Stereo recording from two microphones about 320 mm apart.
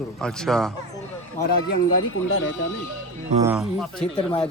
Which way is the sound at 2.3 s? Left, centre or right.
Left.